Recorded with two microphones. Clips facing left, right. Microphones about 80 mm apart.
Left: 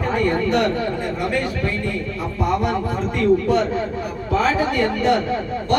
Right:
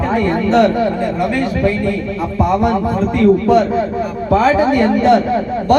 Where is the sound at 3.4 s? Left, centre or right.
Right.